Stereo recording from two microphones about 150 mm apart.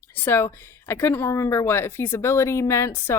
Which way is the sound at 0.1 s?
15° left (ahead or behind).